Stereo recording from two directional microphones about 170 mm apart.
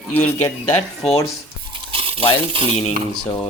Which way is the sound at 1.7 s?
30° right (ahead or behind).